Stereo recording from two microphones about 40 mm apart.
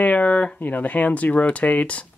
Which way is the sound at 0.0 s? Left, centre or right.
Left.